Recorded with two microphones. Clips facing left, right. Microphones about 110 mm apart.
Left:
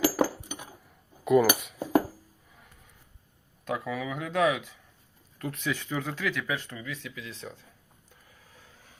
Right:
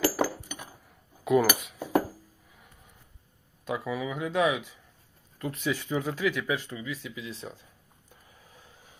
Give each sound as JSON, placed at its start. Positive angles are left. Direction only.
{"t": 0.0, "sound": "a sound", "side_deg": 25}
{"t": 1.2, "sound": "cutlery", "side_deg": 0}
{"t": 3.7, "sound": "speech", "side_deg": -5}
{"t": 8.5, "sound": "vehicle", "side_deg": -15}